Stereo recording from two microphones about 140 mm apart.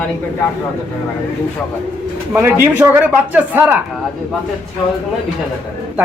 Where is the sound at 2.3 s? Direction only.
15° right (ahead or behind).